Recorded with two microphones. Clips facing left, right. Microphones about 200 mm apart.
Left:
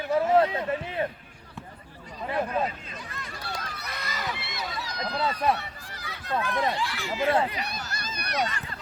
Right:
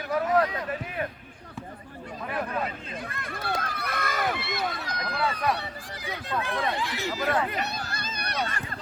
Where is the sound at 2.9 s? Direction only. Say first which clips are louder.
Right 4 dB; 55° right (ahead or behind).